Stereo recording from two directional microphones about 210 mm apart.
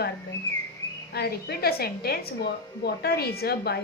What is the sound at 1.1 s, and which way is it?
A woman's voice, 50° left (ahead or behind).